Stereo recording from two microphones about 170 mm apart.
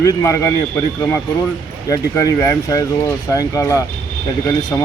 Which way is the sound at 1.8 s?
20° left (ahead or behind).